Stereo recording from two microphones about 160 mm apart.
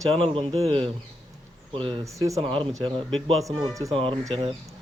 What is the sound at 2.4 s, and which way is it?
Speech, 35° right (ahead or behind).